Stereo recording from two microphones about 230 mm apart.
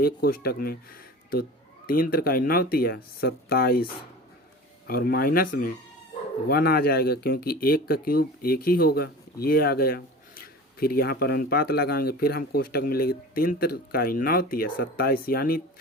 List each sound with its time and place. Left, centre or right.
0.0 s speech: left
4.9 s speech: left